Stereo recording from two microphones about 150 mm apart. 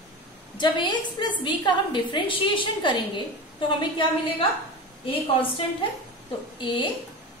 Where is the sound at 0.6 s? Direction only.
30° left (ahead or behind).